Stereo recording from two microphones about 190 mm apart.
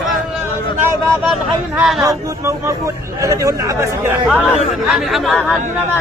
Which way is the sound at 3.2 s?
15° right (ahead or behind).